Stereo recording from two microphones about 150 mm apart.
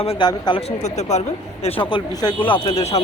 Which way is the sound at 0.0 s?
35° left (ahead or behind).